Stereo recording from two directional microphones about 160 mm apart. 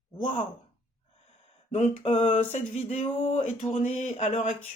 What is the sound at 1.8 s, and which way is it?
Speech, 50° left (ahead or behind).